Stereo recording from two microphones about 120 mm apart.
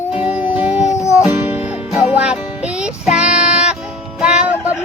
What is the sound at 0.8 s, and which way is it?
Music, 25° left (ahead or behind).